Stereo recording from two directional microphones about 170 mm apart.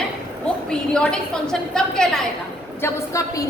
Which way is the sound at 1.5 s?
5° left (ahead or behind).